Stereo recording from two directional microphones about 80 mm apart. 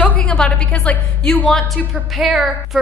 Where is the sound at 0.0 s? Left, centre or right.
Centre.